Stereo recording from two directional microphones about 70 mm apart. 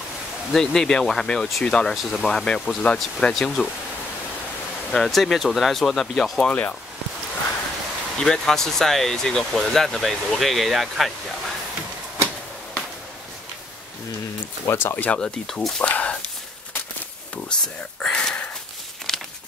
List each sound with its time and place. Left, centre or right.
0.6 s speech: centre
4.9 s speech: centre
8.2 s speech: centre
14.7 s speech: left
15.0 s speech: centre
15.4 s speech: centre
15.8 s speech: centre
17.5 s a sound: centre